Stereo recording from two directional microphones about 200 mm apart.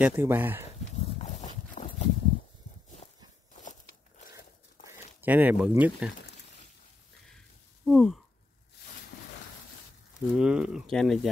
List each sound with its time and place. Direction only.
0.0 s speech: 10° right (ahead or behind)
0.9 s walk: 35° left (ahead or behind)
4.8 s a sound: 40° left (ahead or behind)
5.2 s speech: 10° right (ahead or behind)
7.2 s sigh: centre (ahead or behind)
10.3 s speech: 5° right (ahead or behind)